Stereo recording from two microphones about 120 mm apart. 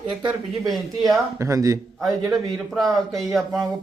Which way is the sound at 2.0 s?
5° left (ahead or behind).